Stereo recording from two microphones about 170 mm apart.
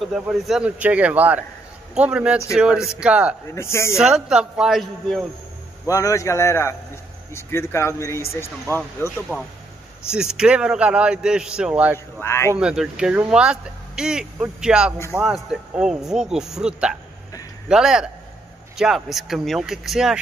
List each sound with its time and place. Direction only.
0.0 s speech: centre (ahead or behind)
3.5 s speech: 15° left (ahead or behind)
3.9 s speech: 5° right (ahead or behind)
5.9 s speech: 20° left (ahead or behind)
9.3 s speech: 5° right (ahead or behind)
12.2 s speech: 15° left (ahead or behind)
12.5 s speech: 5° right (ahead or behind)